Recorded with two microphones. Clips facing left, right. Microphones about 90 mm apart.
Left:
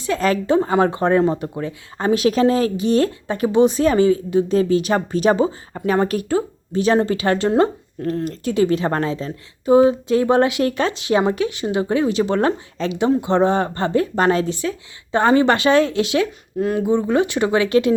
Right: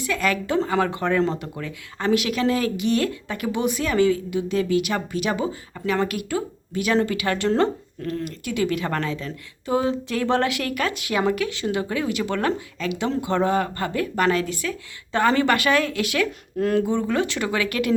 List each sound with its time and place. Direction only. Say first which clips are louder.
0.0 s a woman's voice: left 5 dB; 30° left (ahead or behind)
16.6 s speech: left 1 dB; 5° left (ahead or behind)
16.8 s a woman's voice: left 5 dB; 20° left (ahead or behind)